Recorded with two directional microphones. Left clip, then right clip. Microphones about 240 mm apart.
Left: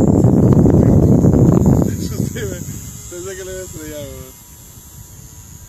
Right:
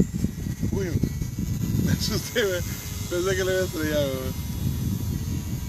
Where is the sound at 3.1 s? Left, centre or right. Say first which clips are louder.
Right 4 dB; right.